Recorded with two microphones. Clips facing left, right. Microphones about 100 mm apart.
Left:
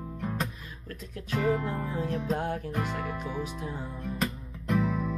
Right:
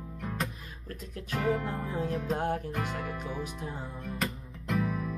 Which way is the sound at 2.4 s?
45° right (ahead or behind).